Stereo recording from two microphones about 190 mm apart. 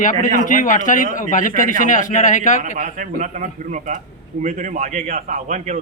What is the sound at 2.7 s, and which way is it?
A man's voice, 45° right (ahead or behind).